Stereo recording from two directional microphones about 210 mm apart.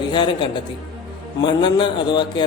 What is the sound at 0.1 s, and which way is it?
Speech, 20° left (ahead or behind).